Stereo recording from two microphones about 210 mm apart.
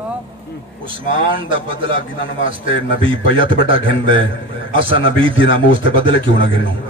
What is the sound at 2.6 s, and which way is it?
A man's voice, 25° right (ahead or behind).